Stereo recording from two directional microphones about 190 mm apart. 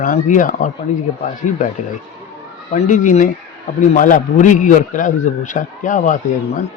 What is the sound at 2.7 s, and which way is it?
A man's voice, 40° left (ahead or behind).